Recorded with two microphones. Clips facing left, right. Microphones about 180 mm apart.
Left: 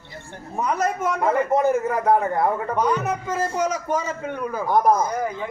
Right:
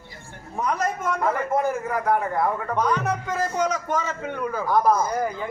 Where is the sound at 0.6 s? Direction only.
5° left (ahead or behind).